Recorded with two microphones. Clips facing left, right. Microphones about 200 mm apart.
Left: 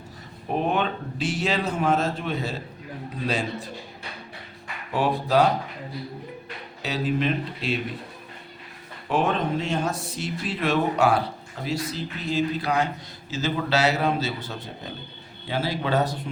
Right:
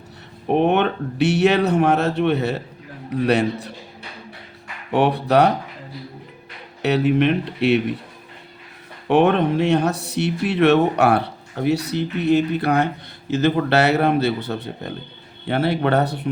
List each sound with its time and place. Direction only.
0.4 s speech: 65° right (ahead or behind)
4.9 s speech: 65° right (ahead or behind)
6.8 s speech: 65° right (ahead or behind)
9.0 s speech: 65° right (ahead or behind)